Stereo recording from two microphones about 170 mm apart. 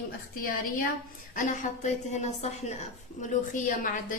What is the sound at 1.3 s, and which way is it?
A woman's voice, 45° left (ahead or behind).